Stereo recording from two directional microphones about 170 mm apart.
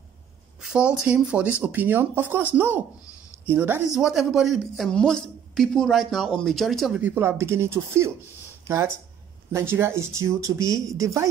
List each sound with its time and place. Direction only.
0.6 s speech: 5° right (ahead or behind)
7.0 s speech: 10° right (ahead or behind)